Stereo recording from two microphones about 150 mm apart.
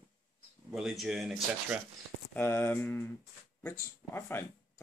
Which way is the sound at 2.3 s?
15° left (ahead or behind).